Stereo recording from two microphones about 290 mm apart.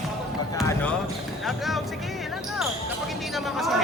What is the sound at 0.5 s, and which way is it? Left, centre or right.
Basketball bounce, centre.